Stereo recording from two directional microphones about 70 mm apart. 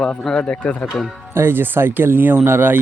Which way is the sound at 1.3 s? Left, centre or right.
Right.